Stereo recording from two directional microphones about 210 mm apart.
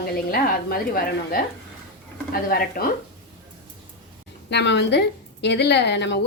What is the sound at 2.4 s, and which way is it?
Speech, 45° left (ahead or behind).